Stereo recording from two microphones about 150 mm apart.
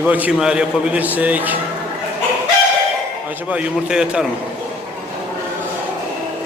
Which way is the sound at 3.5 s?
5° right (ahead or behind).